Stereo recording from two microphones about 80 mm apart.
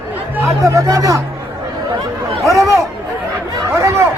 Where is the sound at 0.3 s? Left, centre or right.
Right.